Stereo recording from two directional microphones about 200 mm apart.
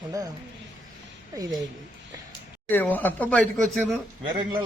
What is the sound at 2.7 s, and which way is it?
Speech, 10° left (ahead or behind).